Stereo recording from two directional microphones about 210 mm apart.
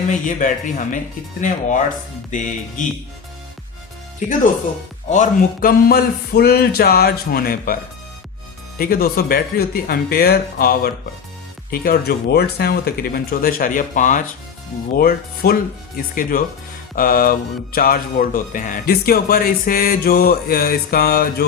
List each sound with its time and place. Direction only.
0.3 s speech: 40° left (ahead or behind)
5.0 s speech: 35° left (ahead or behind)
8.8 s speech: 45° left (ahead or behind)